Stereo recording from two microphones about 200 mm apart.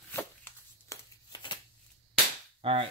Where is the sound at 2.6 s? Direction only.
30° right (ahead or behind).